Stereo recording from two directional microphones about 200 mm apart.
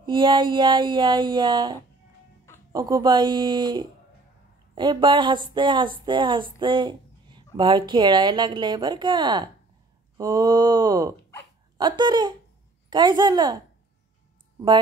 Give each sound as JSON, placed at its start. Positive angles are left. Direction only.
{"t": 0.0, "sound": "speech", "side_deg": -25}